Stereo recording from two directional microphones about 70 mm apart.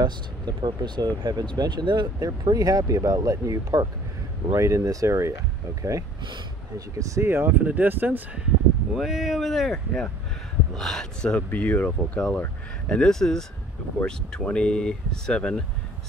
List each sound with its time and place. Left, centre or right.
0.0 s speech: right
7.2 s speech: right
8.9 s speech: centre